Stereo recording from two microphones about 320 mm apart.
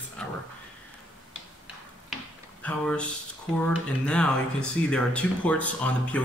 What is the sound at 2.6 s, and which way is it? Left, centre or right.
Speech, centre.